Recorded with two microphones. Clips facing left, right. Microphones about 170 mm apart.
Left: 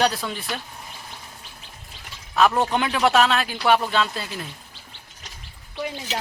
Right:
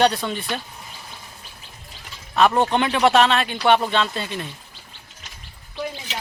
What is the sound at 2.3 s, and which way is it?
Speech, centre (ahead or behind).